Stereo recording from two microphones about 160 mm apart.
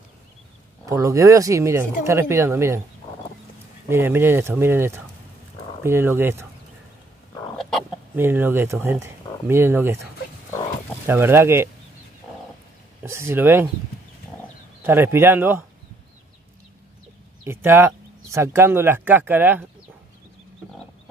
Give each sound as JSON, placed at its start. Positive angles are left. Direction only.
{"t": 0.8, "sound": "speech", "side_deg": -20}
{"t": 3.9, "sound": "speech", "side_deg": -15}
{"t": 8.2, "sound": "speech", "side_deg": -15}
{"t": 11.1, "sound": "speech", "side_deg": -15}
{"t": 13.0, "sound": "speech", "side_deg": -15}
{"t": 14.8, "sound": "speech", "side_deg": -15}
{"t": 17.5, "sound": "speech", "side_deg": -15}